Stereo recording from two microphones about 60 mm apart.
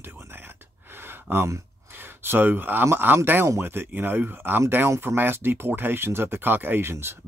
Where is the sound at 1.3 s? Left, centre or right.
Right.